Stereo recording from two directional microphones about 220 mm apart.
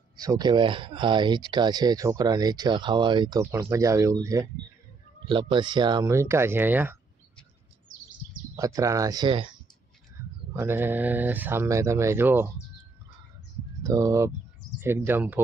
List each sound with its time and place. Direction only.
0.2 s speech: 15° right (ahead or behind)
8.5 s speech: 15° right (ahead or behind)
10.5 s speech: 10° right (ahead or behind)
13.8 s speech: 15° right (ahead or behind)